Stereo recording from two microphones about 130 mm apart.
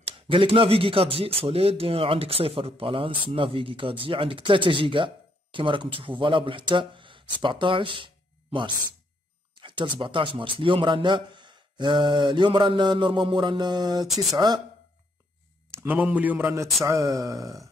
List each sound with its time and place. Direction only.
0.3 s a man's voice: 45° right (ahead or behind)
14.0 s speech: centre (ahead or behind)
15.7 s a man's voice: 15° right (ahead or behind)